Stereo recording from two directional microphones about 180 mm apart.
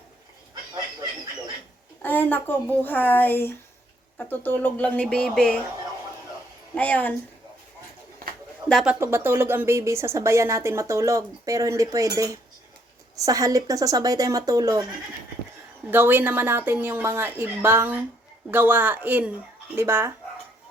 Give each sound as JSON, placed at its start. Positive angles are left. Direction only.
{"t": 2.0, "sound": "speech", "side_deg": 10}
{"t": 6.7, "sound": "speech", "side_deg": 10}
{"t": 8.7, "sound": "a woman's voice", "side_deg": -5}
{"t": 15.9, "sound": "a woman's voice", "side_deg": -10}